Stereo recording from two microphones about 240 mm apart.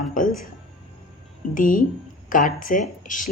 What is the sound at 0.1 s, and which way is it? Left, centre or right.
Music, left.